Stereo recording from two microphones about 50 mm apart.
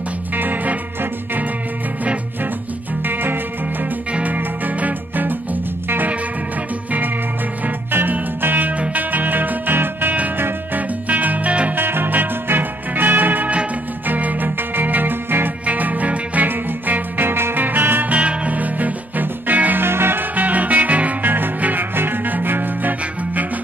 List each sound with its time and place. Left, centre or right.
0.4 s music: right
3.1 s music: right
4.1 s music: right
7.6 s music: right
11.7 s music: right
18.1 s music: right
19.8 s music: right
20.3 s music: right